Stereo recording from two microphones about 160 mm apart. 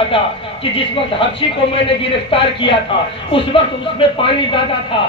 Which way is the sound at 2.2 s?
35° left (ahead or behind).